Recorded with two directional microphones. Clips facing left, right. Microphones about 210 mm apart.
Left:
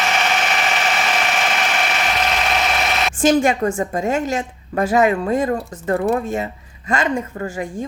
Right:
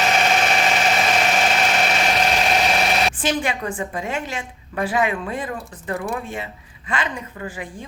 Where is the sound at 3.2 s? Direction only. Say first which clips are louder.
Left 8 dB; 45° left (ahead or behind).